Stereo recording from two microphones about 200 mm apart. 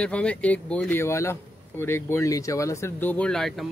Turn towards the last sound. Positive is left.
turn(degrees=0)  # may be behind; listen again after turning